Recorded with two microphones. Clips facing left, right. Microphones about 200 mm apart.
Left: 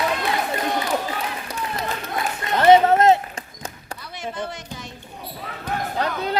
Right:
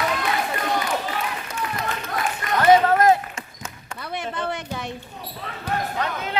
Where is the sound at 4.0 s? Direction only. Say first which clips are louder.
Right 2 dB; 60° right (ahead or behind).